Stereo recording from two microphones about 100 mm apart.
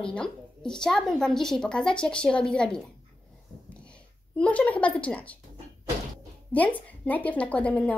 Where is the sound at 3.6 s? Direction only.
10° left (ahead or behind).